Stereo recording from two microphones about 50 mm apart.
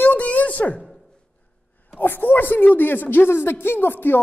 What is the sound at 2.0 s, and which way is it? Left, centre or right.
A woman's voice, left.